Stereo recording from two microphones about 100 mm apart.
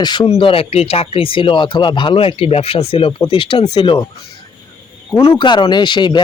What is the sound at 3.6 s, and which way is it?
Speech, 45° left (ahead or behind).